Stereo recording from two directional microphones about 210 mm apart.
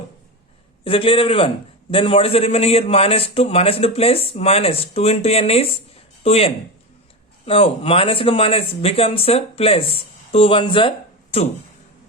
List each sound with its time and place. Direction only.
0.9 s speech: 25° left (ahead or behind)